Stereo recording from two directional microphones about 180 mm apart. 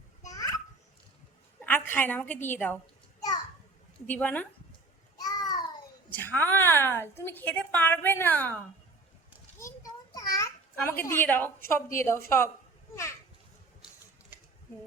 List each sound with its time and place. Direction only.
0.3 s children playing: 20° left (ahead or behind)
1.9 s a woman's voice: 10° left (ahead or behind)
4.0 s a woman's voice: 10° left (ahead or behind)
5.1 s babbling: 20° left (ahead or behind)
6.1 s a woman's voice: 10° left (ahead or behind)
9.6 s a sound: 20° left (ahead or behind)
11.9 s a woman's voice: 15° left (ahead or behind)